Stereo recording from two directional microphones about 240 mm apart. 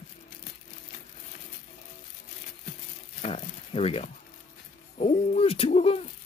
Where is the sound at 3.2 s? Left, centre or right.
Left.